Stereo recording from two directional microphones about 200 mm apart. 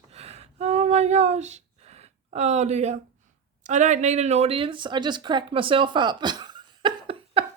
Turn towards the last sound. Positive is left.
turn(degrees=-25)  # may be behind; listen again after turning